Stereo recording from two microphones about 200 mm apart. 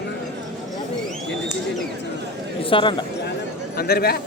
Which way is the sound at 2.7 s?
25° left (ahead or behind).